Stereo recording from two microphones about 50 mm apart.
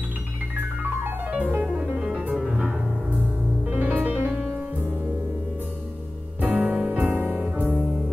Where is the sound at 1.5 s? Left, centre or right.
Right.